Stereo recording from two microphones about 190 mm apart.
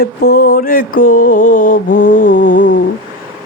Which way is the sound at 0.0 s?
60° left (ahead or behind).